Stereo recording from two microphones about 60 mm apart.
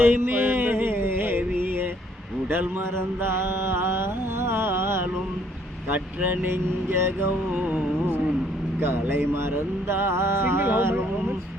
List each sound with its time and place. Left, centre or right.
0.0 s music: right
2.5 s mantra: right
6.2 s mantra: right
7.5 s music: right
8.8 s mantra: right